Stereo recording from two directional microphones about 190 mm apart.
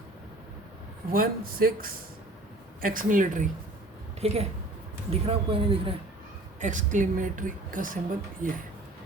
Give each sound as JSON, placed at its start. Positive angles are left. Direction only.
{"t": 1.1, "sound": "a woman's voice", "side_deg": -50}
{"t": 6.6, "sound": "a woman's voice", "side_deg": -40}